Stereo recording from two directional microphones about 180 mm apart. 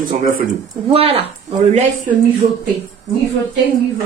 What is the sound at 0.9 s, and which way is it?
Speech, 35° right (ahead or behind).